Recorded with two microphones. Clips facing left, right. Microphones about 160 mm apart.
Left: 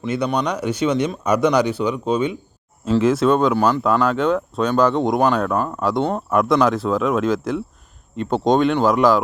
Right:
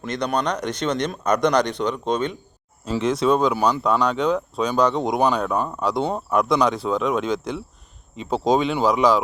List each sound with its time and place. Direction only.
0.0 s speech: 5° left (ahead or behind)